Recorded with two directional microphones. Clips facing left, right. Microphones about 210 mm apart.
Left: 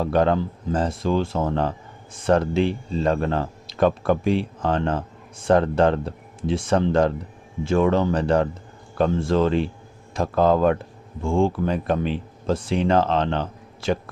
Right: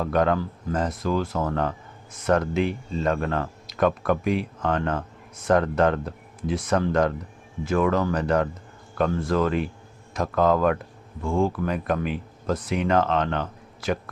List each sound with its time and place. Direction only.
0.0 s speech: 30° left (ahead or behind)